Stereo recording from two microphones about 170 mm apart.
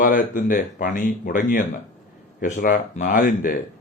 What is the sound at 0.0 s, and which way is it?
Speech, 50° left (ahead or behind).